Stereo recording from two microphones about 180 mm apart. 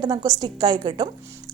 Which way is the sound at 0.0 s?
20° right (ahead or behind).